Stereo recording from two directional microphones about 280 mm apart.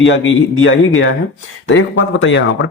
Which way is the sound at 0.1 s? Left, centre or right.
Left.